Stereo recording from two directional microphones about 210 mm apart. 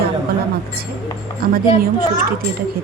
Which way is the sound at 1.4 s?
45° right (ahead or behind).